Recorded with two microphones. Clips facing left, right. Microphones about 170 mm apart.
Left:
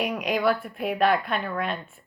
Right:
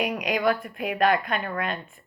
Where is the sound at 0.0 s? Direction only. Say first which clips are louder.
Even; 45° right (ahead or behind).